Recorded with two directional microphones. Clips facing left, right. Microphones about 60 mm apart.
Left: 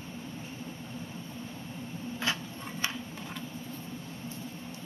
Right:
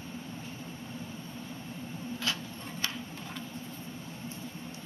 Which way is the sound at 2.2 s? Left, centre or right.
Left.